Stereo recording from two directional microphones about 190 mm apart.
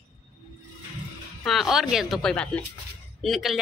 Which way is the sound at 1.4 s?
Centre (ahead or behind).